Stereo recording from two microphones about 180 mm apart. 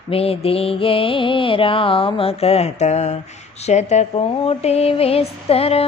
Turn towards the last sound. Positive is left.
turn(degrees=35)  # may be behind; listen again after turning